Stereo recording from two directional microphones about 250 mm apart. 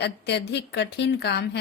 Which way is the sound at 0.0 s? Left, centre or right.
Left.